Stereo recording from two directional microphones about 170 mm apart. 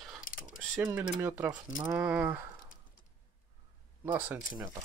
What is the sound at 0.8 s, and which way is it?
Speech, 10° right (ahead or behind).